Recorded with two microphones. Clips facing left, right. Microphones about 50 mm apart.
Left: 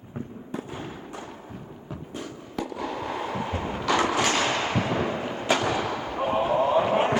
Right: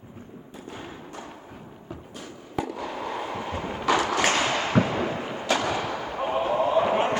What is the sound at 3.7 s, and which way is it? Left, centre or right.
Vehicle, centre.